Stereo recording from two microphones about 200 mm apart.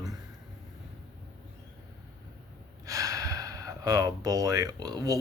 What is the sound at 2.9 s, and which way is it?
Speech, 15° right (ahead or behind).